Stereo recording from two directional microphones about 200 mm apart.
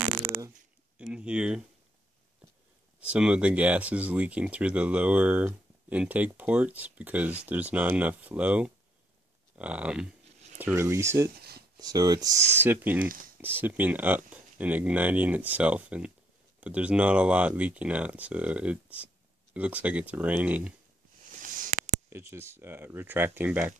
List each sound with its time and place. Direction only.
0.9 s a sound: 5° right (ahead or behind)
3.1 s speech: 5° right (ahead or behind)
13.0 s speech: 45° right (ahead or behind)
13.4 s speech: 10° right (ahead or behind)
21.4 s a sound: 40° right (ahead or behind)
22.1 s speech: 15° right (ahead or behind)